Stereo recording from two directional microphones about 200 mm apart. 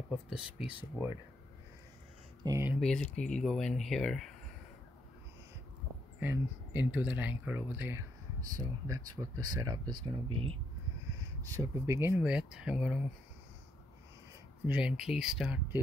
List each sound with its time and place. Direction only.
0.1 s speech: 5° right (ahead or behind)
2.4 s speech: 15° right (ahead or behind)
2.8 s speech: 5° left (ahead or behind)
6.1 s speech: 10° right (ahead or behind); by 10.6 s 25° right (ahead or behind)
11.4 s speech: 15° right (ahead or behind)
14.7 s speech: 5° right (ahead or behind)